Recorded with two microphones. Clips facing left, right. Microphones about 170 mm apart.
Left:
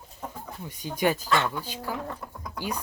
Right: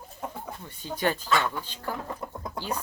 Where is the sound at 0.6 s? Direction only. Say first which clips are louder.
Left 3 dB; 15° left (ahead or behind).